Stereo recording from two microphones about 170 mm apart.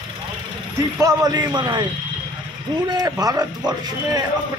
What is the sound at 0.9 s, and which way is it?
Speech, 20° right (ahead or behind).